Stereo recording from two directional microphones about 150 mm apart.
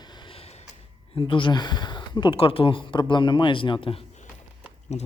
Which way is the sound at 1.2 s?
35° left (ahead or behind).